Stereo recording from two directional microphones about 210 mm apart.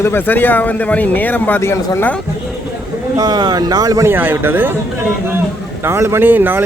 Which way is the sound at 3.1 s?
20° right (ahead or behind).